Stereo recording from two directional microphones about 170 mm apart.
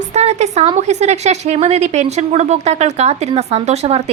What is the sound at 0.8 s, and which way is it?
Speech, 40° right (ahead or behind).